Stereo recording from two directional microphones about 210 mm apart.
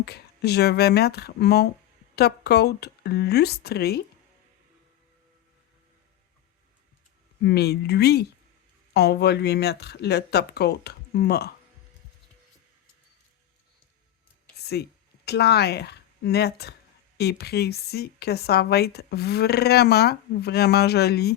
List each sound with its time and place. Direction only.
0.0 s speech: 50° left (ahead or behind)
7.4 s speech: 50° left (ahead or behind)
14.5 s a woman's voice: 50° left (ahead or behind)